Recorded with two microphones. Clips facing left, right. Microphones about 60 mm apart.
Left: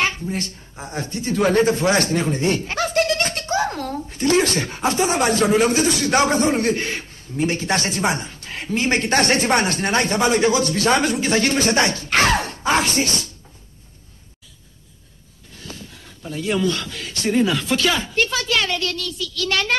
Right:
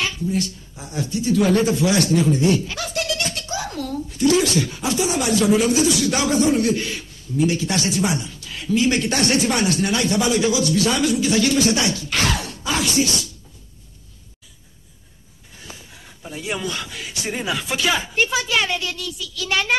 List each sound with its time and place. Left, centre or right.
0.0 s speech: left
15.5 s speech: centre